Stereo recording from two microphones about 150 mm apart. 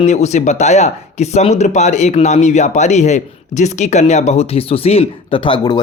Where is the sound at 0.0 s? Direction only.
50° left (ahead or behind).